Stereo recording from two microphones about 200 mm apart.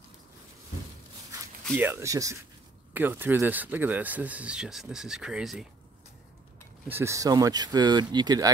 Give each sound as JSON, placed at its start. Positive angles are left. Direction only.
{"t": 1.8, "sound": "speech", "side_deg": -10}
{"t": 6.9, "sound": "speech", "side_deg": -15}